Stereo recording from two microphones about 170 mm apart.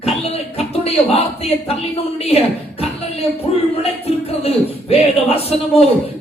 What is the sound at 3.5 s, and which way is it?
A man's voice, 40° left (ahead or behind).